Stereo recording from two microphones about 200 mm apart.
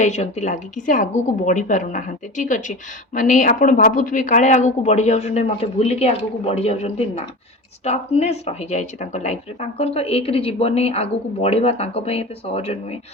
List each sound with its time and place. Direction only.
0.0 s speech: 35° left (ahead or behind)